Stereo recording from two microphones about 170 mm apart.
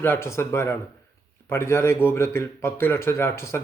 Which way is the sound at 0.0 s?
15° left (ahead or behind).